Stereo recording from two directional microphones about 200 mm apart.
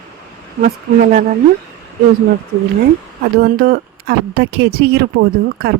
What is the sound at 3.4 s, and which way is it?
Speech, 50° right (ahead or behind).